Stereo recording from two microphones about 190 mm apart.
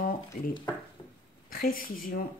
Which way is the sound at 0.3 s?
50° left (ahead or behind).